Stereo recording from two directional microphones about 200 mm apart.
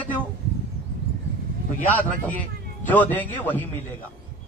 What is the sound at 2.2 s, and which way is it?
A man's voice, 10° left (ahead or behind).